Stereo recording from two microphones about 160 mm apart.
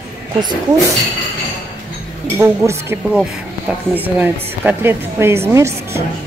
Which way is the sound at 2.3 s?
15° right (ahead or behind).